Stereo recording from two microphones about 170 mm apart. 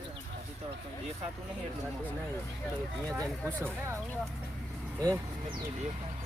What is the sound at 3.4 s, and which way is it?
Speech, 15° right (ahead or behind).